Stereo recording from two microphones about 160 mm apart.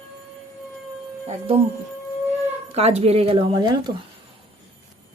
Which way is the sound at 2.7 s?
40° right (ahead or behind).